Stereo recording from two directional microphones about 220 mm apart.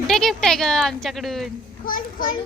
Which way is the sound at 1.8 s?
40° left (ahead or behind).